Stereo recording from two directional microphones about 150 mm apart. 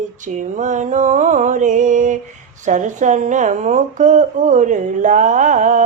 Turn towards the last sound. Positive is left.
turn(degrees=-55)  # may be behind; listen again after turning